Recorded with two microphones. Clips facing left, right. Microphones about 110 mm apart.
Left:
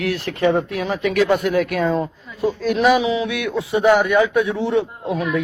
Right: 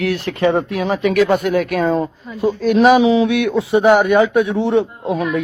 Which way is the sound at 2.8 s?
30° right (ahead or behind).